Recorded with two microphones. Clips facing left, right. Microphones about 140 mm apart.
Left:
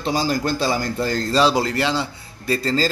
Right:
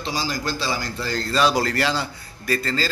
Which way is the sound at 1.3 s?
25° left (ahead or behind).